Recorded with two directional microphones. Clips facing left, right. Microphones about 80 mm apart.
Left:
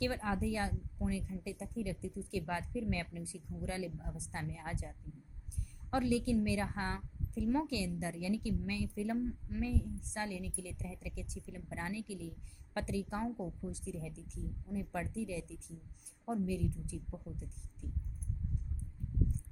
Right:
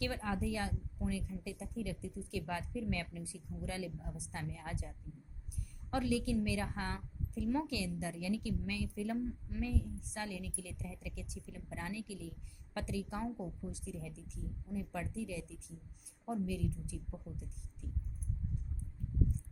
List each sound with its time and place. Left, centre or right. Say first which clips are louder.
0.0 s a woman's voice: left 2 dB; left
13.2 s a woman's voice: left 2 dB; left